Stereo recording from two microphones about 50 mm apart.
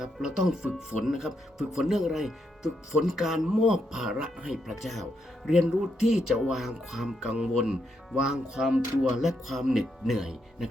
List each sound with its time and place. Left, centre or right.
0.0 s speech: centre
4.6 s speech: centre
7.3 s speech: centre